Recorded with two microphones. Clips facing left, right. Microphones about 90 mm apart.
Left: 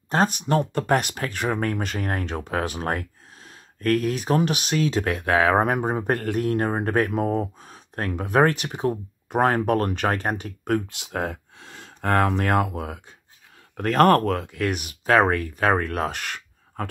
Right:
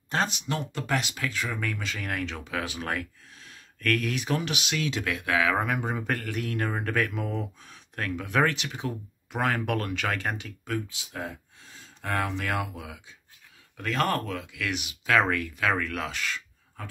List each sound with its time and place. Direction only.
0.1 s speech: 45° left (ahead or behind)
10.6 s speech: 65° left (ahead or behind)